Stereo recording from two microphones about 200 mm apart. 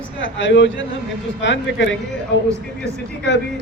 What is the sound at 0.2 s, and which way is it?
A man's voice, 65° left (ahead or behind).